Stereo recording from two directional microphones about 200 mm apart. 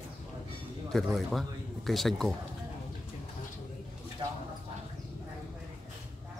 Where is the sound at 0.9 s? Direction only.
Centre (ahead or behind).